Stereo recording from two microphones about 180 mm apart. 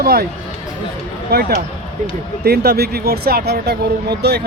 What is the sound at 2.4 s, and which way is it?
Speech, 60° right (ahead or behind).